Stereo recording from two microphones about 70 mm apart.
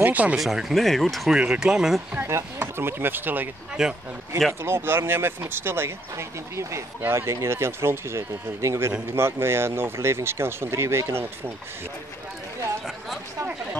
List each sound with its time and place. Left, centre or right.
0.0 s speech: right
0.4 s speech: centre
1.3 s speech: centre
2.2 s speech: right
3.8 s speech: centre
4.6 s speech: right